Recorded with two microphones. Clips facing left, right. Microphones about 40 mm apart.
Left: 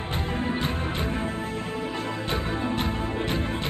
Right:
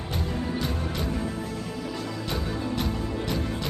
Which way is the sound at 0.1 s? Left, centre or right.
Left.